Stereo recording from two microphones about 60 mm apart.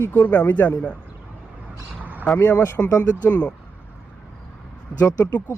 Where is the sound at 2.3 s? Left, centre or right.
Left.